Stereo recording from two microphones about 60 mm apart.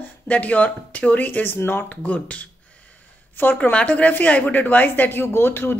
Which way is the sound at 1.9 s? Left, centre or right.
Left.